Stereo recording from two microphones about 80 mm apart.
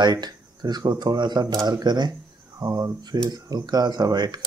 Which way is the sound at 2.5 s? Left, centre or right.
Right.